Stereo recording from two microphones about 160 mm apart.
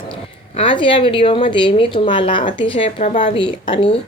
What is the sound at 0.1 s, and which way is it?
Speech, 35° left (ahead or behind).